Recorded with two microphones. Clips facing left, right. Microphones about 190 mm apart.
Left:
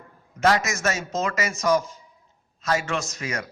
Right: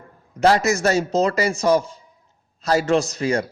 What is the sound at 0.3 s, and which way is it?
A man's voice, 30° right (ahead or behind).